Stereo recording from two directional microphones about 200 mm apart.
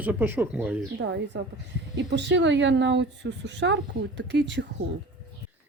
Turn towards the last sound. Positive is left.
turn(degrees=-60)  # may be behind; listen again after turning